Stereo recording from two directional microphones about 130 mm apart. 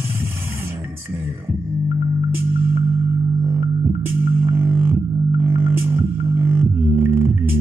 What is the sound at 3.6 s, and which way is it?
Music, 15° right (ahead or behind).